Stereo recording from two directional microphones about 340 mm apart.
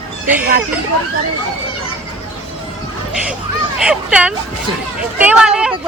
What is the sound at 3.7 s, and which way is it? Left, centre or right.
A woman's voice, centre.